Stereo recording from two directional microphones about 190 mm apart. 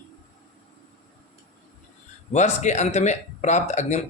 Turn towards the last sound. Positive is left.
turn(degrees=35)  # may be behind; listen again after turning